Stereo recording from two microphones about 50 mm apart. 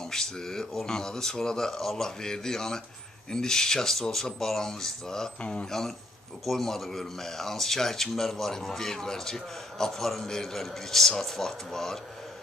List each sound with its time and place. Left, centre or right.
0.0 s speech: centre
5.4 s speech: left
5.7 s speech: centre